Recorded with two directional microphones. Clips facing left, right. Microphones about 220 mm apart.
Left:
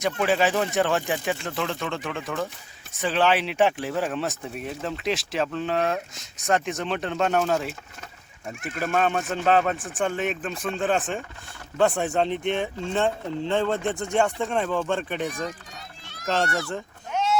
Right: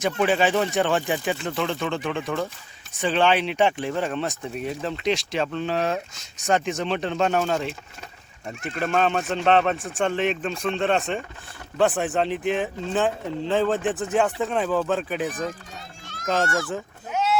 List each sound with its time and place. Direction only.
0.0 s speech: centre (ahead or behind)
16.6 s sheep: 5° right (ahead or behind)